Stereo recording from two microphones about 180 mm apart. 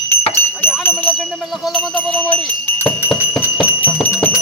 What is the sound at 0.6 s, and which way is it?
Jingle bell, 10° left (ahead or behind).